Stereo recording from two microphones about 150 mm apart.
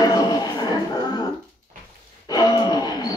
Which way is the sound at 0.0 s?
25° left (ahead or behind).